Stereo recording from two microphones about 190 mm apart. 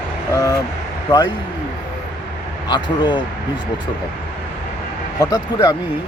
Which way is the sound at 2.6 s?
25° left (ahead or behind).